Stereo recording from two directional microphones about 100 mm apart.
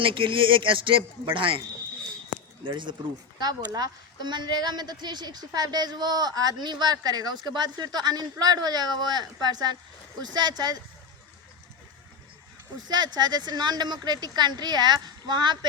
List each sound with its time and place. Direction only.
0.0 s a man's voice: 55° right (ahead or behind)
2.6 s a woman's voice: 50° right (ahead or behind)
12.9 s a woman's voice: 45° right (ahead or behind)